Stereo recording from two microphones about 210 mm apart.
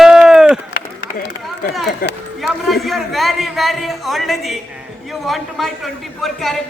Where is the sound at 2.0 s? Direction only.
45° left (ahead or behind).